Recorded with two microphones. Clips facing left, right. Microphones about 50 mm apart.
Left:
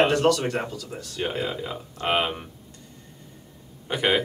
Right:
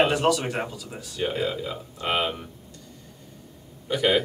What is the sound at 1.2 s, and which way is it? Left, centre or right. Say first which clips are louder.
Speech: right 1 dB; centre.